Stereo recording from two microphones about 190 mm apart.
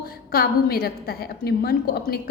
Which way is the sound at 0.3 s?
50° left (ahead or behind).